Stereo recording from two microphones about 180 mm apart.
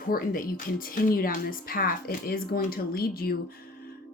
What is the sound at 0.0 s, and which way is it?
Speech, 50° left (ahead or behind).